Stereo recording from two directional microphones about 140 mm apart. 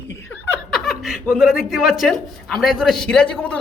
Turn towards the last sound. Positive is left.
turn(degrees=10)  # may be behind; listen again after turning